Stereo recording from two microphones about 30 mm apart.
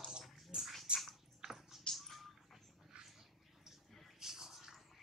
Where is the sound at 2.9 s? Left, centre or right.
Right.